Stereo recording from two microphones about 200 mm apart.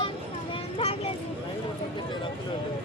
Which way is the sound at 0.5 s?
30° left (ahead or behind).